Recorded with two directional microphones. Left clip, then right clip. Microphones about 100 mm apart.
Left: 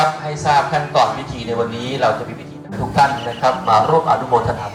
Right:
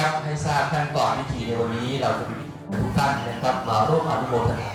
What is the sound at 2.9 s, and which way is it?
Speech, 20° left (ahead or behind).